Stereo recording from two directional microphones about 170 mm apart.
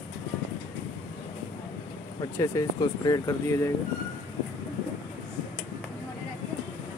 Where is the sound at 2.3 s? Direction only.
20° left (ahead or behind).